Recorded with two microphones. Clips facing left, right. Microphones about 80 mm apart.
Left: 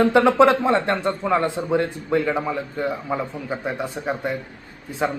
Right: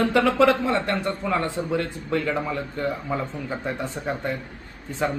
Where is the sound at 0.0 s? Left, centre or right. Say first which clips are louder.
Left 4 dB; left.